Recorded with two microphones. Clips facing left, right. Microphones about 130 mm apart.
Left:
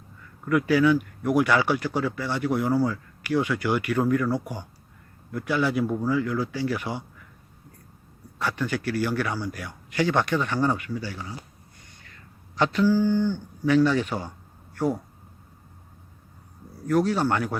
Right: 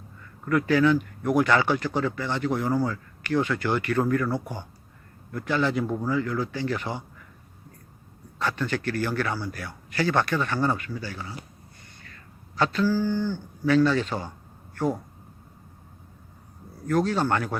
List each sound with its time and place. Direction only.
0.4 s speech: 10° left (ahead or behind)
8.4 s speech: 10° left (ahead or behind)
12.5 s speech: 15° left (ahead or behind)
16.8 s speech: 10° left (ahead or behind)